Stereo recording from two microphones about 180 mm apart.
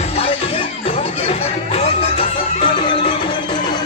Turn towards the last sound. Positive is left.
turn(degrees=30)  # may be behind; listen again after turning